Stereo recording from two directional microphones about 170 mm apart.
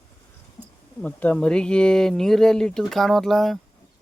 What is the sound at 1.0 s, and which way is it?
Speech, 10° left (ahead or behind).